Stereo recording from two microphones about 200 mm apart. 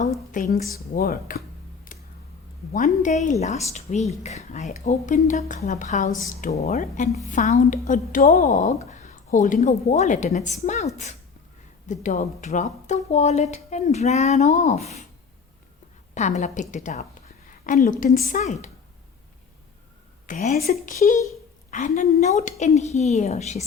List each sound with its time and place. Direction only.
0.3 s speech: 40° left (ahead or behind)
1.9 s tick: 45° left (ahead or behind)
2.7 s speech: 40° left (ahead or behind)
16.1 s speech: 35° left (ahead or behind)
20.2 s speech: 40° left (ahead or behind)